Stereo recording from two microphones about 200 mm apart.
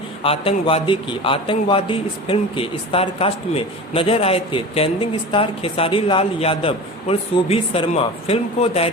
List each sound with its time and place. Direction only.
0.2 s a man's voice: 25° left (ahead or behind)